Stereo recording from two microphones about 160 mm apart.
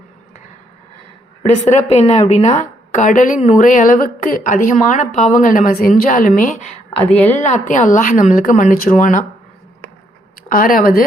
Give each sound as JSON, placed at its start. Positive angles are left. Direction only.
{"t": 1.4, "sound": "a woman's voice", "side_deg": 45}
{"t": 7.7, "sound": "a woman's voice", "side_deg": 55}
{"t": 10.5, "sound": "a woman's voice", "side_deg": 60}